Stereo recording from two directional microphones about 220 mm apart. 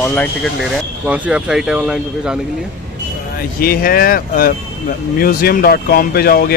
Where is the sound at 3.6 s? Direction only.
40° left (ahead or behind).